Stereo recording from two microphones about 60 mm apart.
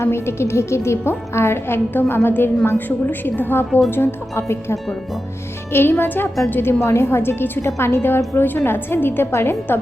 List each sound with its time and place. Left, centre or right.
0.0 s a woman's voice: left
7.8 s a woman's voice: left